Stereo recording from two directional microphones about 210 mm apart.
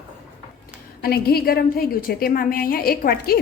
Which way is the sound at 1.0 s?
45° left (ahead or behind).